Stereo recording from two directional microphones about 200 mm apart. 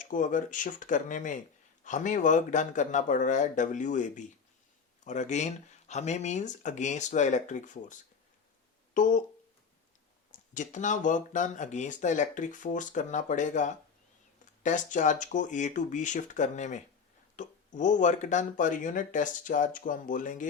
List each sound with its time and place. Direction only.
0.0 s speech: 40° left (ahead or behind)
10.3 s speech: 40° left (ahead or behind)